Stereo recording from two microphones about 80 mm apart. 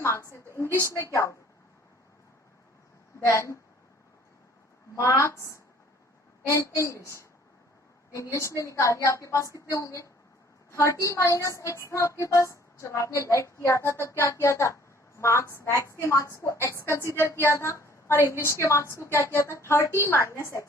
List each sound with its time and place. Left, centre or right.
0.0 s a woman's voice: left
3.2 s a woman's voice: left
4.9 s a woman's voice: left